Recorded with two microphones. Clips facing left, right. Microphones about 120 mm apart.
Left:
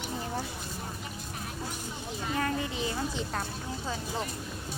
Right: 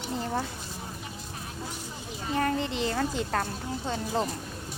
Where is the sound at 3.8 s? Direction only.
35° right (ahead or behind).